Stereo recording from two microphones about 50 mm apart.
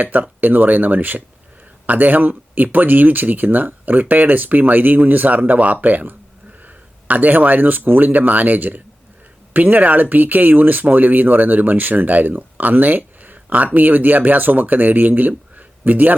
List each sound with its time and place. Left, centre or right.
0.0 s speech: right